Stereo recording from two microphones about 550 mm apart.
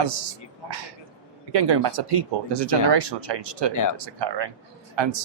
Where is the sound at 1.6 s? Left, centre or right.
Right.